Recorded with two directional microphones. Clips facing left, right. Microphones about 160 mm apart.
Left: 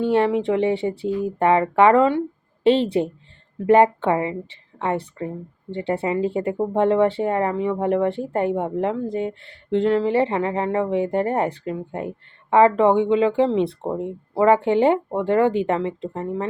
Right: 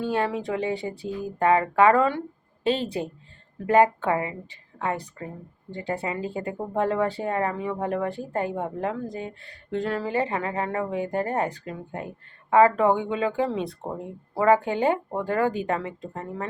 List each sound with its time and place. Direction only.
0.0 s speech: 25° left (ahead or behind)